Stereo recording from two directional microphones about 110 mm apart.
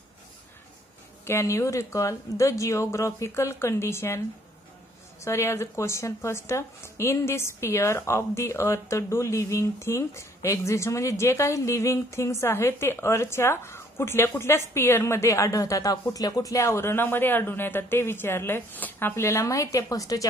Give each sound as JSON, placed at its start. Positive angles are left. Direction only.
{"t": 1.2, "sound": "a woman's voice", "side_deg": 25}
{"t": 5.2, "sound": "a woman's voice", "side_deg": 25}